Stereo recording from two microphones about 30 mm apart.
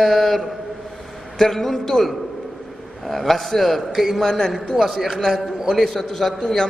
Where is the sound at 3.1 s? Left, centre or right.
Centre.